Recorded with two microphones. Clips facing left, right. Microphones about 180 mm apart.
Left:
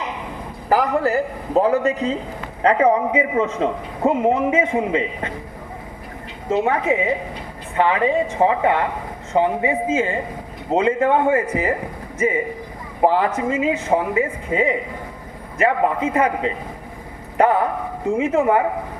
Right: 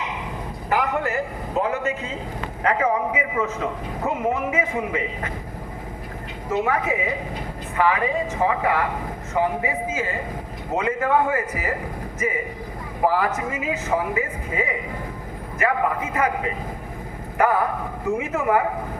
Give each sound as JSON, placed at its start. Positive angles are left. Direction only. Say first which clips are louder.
{"t": 0.7, "sound": "a man's voice", "louder": "left 5 dB", "side_deg": 35}
{"t": 6.5, "sound": "a man's voice", "louder": "left 4 dB", "side_deg": 25}
{"t": 13.0, "sound": "a man's voice", "louder": "left 4 dB", "side_deg": 25}
{"t": 17.3, "sound": "a sound", "louder": "left 3 dB", "side_deg": 30}